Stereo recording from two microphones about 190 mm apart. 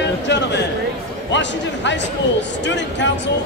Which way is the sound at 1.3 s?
70° left (ahead or behind).